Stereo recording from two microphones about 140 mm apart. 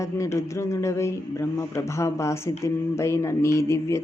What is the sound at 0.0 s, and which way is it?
A man's voice, 20° left (ahead or behind).